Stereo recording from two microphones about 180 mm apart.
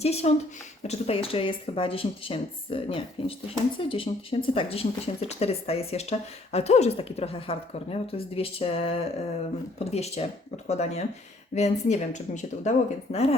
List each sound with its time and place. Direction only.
0.0 s speech: 35° left (ahead or behind)